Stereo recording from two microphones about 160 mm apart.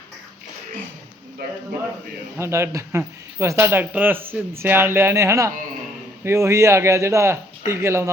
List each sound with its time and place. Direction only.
2.4 s speech: 15° right (ahead or behind)